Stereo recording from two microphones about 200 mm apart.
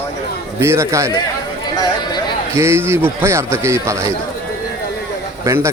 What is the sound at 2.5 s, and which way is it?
A man's voice, 15° right (ahead or behind).